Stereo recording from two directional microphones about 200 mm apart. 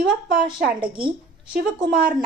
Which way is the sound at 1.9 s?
5° right (ahead or behind).